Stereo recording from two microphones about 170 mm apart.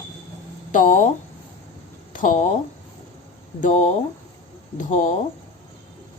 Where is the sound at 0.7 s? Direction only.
50° left (ahead or behind).